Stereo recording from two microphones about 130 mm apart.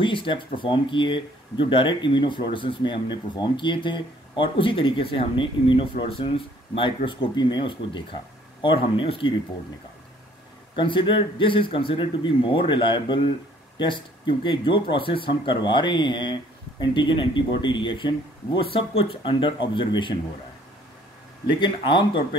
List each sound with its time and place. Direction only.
0.0 s speech: 40° left (ahead or behind)
10.8 s speech: 40° left (ahead or behind)
21.5 s speech: 35° left (ahead or behind)